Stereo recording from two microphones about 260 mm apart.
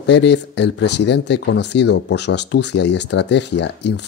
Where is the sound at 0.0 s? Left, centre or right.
Left.